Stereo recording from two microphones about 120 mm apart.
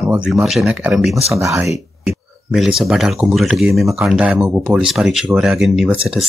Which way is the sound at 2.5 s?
5° right (ahead or behind).